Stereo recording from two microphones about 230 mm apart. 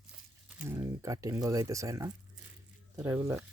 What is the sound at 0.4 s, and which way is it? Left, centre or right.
Speech, centre.